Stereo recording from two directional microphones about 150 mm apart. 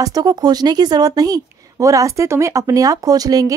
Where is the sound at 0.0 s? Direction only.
25° right (ahead or behind).